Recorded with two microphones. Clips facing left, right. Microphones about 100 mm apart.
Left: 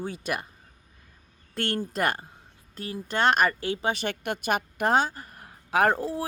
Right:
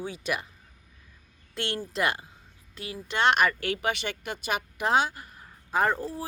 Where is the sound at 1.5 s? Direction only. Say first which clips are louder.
Left 2 dB; 45° left (ahead or behind).